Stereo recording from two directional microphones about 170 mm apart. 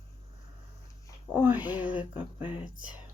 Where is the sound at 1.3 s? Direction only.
10° right (ahead or behind).